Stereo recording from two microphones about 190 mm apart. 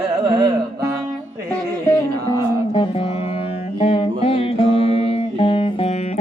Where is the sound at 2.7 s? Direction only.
30° left (ahead or behind).